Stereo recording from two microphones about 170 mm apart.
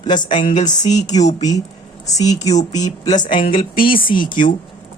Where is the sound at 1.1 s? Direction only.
45° left (ahead or behind).